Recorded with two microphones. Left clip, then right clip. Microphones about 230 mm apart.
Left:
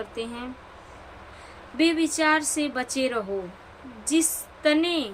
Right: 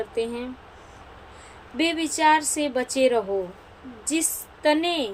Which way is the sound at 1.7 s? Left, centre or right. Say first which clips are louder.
Left 1 dB; centre.